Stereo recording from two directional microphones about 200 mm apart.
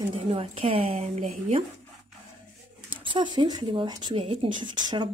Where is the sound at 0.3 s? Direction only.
30° right (ahead or behind).